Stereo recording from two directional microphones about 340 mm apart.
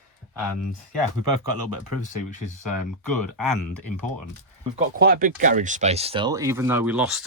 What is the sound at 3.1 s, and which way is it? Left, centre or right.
Speech, right.